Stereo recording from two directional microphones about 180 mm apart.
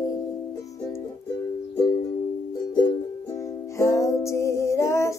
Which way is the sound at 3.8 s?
15° left (ahead or behind).